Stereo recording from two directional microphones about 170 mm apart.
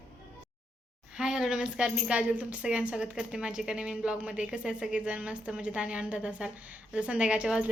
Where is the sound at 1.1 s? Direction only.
5° right (ahead or behind).